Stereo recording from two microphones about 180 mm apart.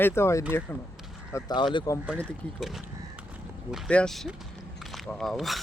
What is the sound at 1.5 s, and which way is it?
Speech, 25° left (ahead or behind).